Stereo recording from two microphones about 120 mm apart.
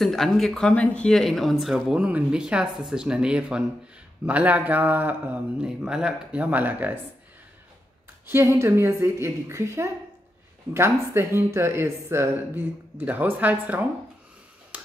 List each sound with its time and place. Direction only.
0.0 s a man's voice: centre (ahead or behind); by 7.0 s 15° right (ahead or behind)
8.3 s speech: 20° right (ahead or behind)